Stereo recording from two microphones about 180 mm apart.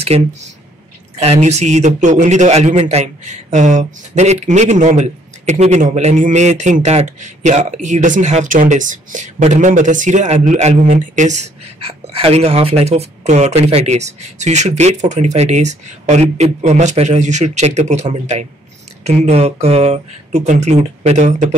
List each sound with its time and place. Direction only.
0.0 s a man's voice: 35° right (ahead or behind)